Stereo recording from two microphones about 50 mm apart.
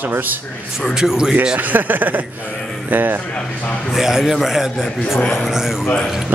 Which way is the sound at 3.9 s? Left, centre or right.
Centre.